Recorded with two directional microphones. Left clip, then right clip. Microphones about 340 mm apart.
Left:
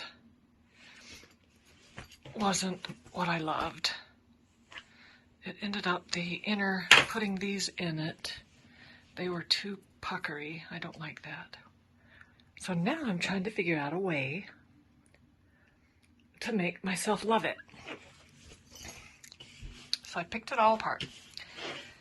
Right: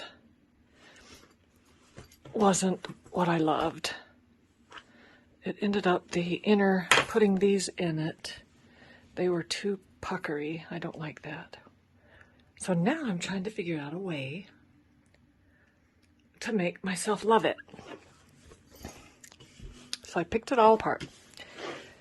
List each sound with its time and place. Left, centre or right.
2.3 s speech: right; by 14.5 s centre
16.4 s speech: centre; by 17.9 s right
19.9 s speech: right
21.3 s a sound: right